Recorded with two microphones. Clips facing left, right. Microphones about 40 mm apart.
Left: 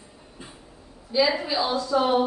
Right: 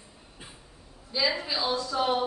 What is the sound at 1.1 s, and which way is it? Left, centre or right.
A woman's voice, centre.